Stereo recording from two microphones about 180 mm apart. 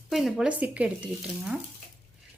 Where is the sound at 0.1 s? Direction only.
Centre (ahead or behind).